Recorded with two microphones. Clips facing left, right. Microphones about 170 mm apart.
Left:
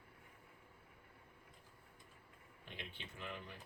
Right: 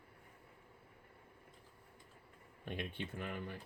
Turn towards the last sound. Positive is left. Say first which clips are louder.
# right 6 dB
turn(degrees=-55)  # may be behind; listen again after turning